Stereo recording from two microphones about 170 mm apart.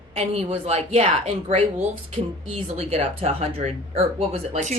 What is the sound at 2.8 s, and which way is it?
Speech, 35° right (ahead or behind).